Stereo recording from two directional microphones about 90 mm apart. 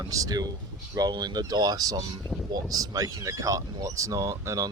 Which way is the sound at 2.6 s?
40° right (ahead or behind).